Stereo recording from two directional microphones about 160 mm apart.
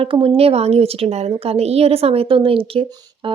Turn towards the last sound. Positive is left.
turn(degrees=-35)  # may be behind; listen again after turning